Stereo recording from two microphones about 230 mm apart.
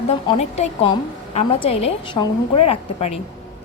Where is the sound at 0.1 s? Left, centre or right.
Left.